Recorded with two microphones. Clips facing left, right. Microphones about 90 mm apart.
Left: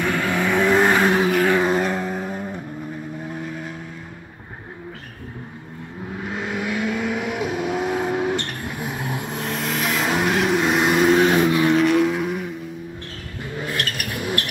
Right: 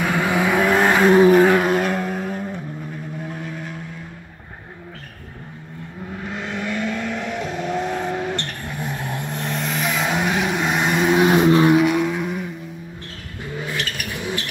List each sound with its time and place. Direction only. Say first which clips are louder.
0.0 s vehicle: right 2 dB; 15° right (ahead or behind); by 2.6 s 5° left (ahead or behind)
6.2 s vehicle: left 1 dB; 5° left (ahead or behind)
11.2 s vehicle: right 3 dB; 25° right (ahead or behind)
11.7 s vehicle: even; 5° right (ahead or behind)
13.7 s vehicle: left 1 dB; centre (ahead or behind)